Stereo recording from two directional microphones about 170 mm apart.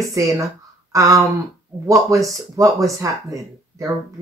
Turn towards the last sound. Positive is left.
turn(degrees=-20)  # may be behind; listen again after turning